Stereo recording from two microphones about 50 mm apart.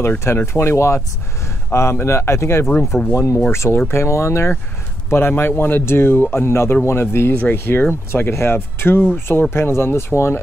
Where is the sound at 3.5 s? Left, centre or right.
Left.